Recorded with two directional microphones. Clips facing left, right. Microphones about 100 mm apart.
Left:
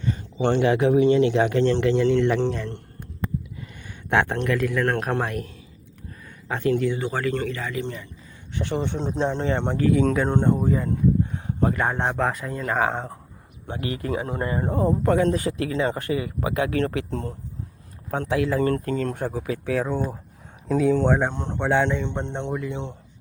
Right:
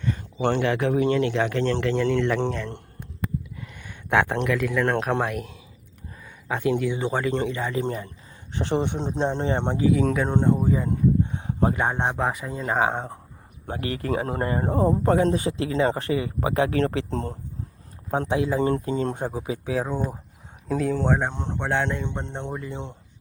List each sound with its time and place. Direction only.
0.5 s speech: 15° left (ahead or behind)
3.8 s a man's voice: 5° right (ahead or behind)
6.5 s speech: 5° right (ahead or behind)
6.9 s speech: 20° right (ahead or behind)
7.8 s speech: 40° right (ahead or behind)
8.5 s speech: 30° right (ahead or behind)
9.8 s a man's voice: 5° right (ahead or behind)
10.8 s speech: 25° right (ahead or behind)
13.7 s speech: 35° right (ahead or behind); by 20.1 s 10° right (ahead or behind)
20.7 s a man's voice: centre (ahead or behind)
21.5 s a man's voice: 5° left (ahead or behind); by 22.9 s 10° right (ahead or behind)